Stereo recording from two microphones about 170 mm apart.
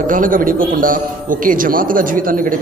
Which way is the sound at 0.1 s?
55° right (ahead or behind).